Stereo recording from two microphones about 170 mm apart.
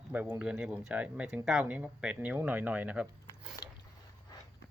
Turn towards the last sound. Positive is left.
turn(degrees=20)  # may be behind; listen again after turning